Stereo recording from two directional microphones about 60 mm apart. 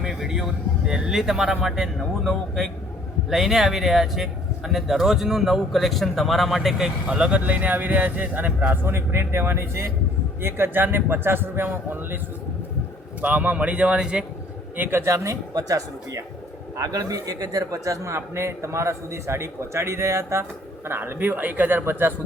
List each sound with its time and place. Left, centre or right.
0.1 s speech: centre
7.1 s speech: centre
8.7 s a man's voice: right
13.2 s speech: right
14.8 s a man's voice: right
17.8 s a man's voice: right
20.8 s a man's voice: right